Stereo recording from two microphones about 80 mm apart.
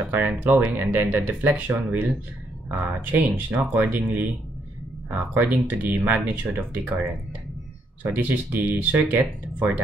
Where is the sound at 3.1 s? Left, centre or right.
Centre.